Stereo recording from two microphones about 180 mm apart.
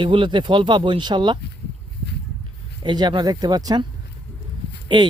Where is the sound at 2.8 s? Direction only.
25° right (ahead or behind).